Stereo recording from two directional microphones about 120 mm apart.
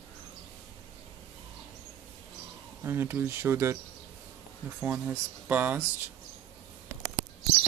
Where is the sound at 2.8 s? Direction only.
20° right (ahead or behind).